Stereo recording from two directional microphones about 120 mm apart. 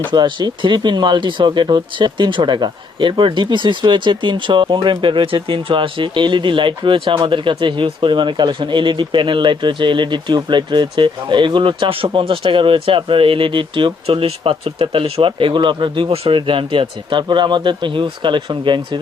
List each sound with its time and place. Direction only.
0.1 s speech: 40° right (ahead or behind)